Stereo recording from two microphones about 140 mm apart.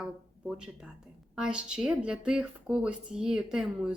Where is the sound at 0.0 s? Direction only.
5° right (ahead or behind).